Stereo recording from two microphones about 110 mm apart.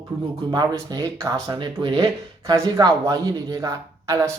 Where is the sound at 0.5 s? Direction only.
40° right (ahead or behind).